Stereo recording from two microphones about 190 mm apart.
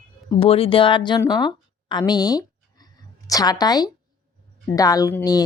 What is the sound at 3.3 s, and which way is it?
Speech, 20° left (ahead or behind).